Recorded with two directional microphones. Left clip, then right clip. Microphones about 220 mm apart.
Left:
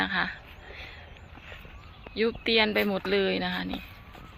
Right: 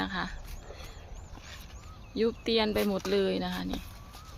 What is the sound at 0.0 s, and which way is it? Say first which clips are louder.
Speech: left 6 dB; 5° right (ahead or behind).